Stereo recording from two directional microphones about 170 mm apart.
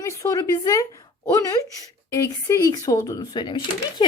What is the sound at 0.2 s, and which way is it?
A woman's voice, 20° left (ahead or behind).